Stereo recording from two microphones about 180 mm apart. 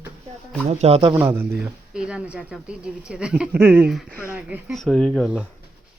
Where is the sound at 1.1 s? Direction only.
10° right (ahead or behind); by 5.5 s 5° left (ahead or behind).